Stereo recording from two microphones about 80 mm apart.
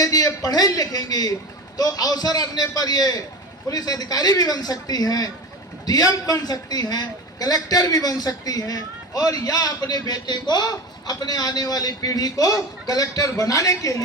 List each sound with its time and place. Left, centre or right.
0.0 s a man's voice: left